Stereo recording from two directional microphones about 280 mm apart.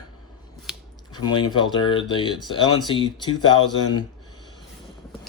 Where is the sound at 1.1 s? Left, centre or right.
Centre.